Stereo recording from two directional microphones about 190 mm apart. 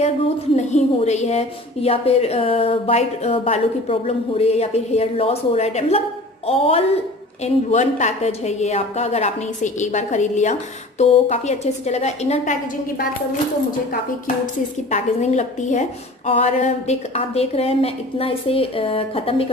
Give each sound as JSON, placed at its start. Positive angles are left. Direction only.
{"t": 0.6, "sound": "a woman's voice", "side_deg": 35}
{"t": 14.2, "sound": "a woman's voice", "side_deg": 40}